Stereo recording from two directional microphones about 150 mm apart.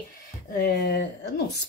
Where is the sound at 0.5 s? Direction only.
90° left.